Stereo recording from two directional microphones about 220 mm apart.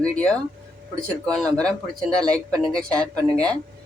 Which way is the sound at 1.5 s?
5° left (ahead or behind).